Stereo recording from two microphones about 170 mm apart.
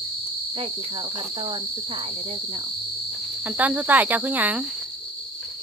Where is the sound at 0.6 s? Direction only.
30° right (ahead or behind).